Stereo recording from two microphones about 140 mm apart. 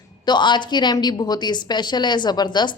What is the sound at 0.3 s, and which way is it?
A woman's voice, 35° left (ahead or behind).